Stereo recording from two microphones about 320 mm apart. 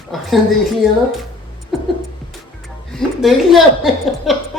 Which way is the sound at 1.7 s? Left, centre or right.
Centre.